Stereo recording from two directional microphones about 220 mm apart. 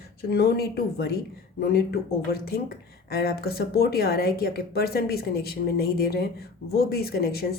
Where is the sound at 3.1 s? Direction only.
45° left (ahead or behind).